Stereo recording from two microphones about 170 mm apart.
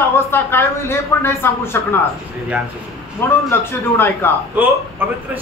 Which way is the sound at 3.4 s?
15° left (ahead or behind).